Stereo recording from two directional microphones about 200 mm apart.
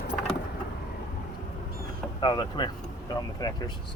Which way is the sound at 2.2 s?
20° left (ahead or behind).